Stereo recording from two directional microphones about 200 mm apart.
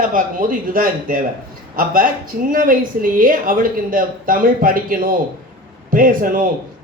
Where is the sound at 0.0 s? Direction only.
45° right (ahead or behind).